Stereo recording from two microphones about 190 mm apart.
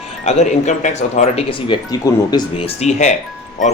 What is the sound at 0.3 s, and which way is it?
Speech, 35° left (ahead or behind).